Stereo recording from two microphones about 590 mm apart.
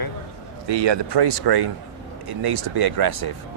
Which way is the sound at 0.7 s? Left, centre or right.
Right.